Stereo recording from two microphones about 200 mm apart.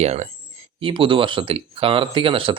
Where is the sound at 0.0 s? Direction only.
30° right (ahead or behind).